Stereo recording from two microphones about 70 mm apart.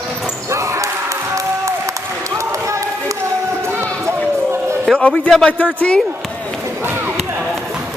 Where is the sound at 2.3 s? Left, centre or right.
Right.